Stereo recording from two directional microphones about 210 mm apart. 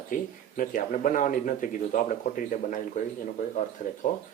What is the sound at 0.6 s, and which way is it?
Speech, 40° left (ahead or behind).